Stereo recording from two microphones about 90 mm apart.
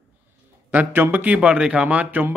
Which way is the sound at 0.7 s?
20° right (ahead or behind).